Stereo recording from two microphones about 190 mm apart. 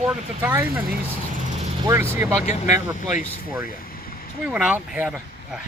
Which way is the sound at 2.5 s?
35° left (ahead or behind).